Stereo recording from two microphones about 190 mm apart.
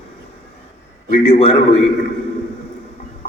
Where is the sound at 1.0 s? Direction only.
35° left (ahead or behind).